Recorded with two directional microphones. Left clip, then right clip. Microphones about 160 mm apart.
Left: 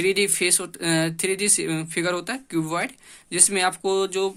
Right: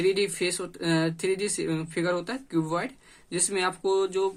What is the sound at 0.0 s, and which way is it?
Speech, 20° left (ahead or behind).